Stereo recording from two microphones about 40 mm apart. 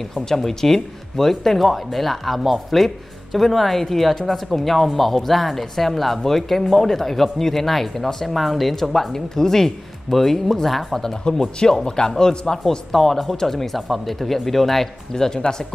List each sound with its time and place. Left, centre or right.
0.1 s speech: centre
11.1 s speech: centre
15.1 s speech: centre